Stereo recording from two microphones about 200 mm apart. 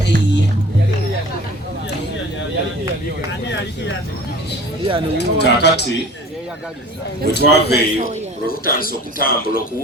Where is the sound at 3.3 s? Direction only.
60° left (ahead or behind).